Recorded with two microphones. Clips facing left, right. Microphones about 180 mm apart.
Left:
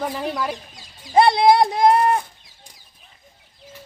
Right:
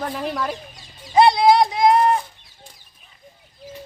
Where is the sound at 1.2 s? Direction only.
55° left (ahead or behind).